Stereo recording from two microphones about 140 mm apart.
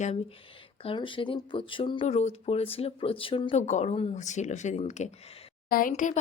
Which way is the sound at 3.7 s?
50° left (ahead or behind).